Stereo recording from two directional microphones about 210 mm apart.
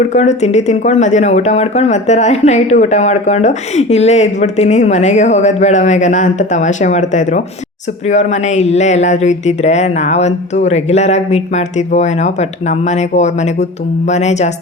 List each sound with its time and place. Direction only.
0.1 s speech: 30° left (ahead or behind)